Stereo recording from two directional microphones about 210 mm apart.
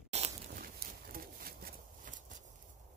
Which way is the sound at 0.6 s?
45° right (ahead or behind).